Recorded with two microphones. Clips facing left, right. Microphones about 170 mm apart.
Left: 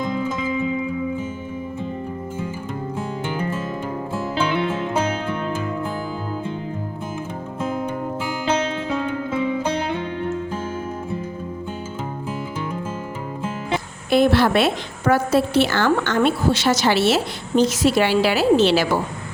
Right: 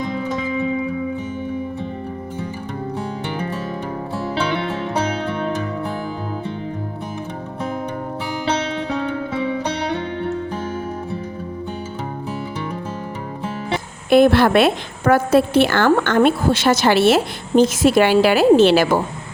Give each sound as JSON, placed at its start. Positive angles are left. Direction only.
{"t": 14.1, "sound": "a woman's voice", "side_deg": -55}